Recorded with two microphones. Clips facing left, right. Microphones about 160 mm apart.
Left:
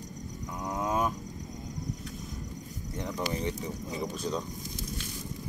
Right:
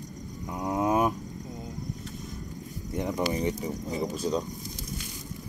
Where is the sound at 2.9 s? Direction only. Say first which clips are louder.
Right 5 dB; 15° right (ahead or behind).